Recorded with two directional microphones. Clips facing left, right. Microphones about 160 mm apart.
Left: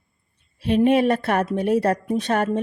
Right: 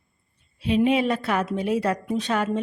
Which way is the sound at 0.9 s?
50° left (ahead or behind).